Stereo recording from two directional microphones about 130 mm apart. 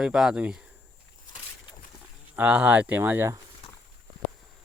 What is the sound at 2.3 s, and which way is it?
Speech, 10° right (ahead or behind).